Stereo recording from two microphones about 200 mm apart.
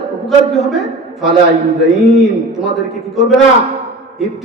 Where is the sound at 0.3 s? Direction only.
Centre (ahead or behind).